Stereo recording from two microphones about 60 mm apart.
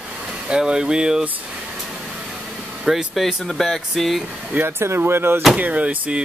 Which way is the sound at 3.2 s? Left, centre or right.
Centre.